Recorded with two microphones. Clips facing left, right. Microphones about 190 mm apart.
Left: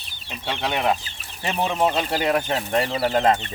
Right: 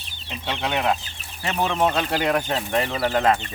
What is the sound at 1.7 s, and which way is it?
Speech, 10° left (ahead or behind).